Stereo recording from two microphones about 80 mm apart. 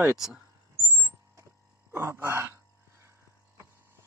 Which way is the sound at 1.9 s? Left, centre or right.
Right.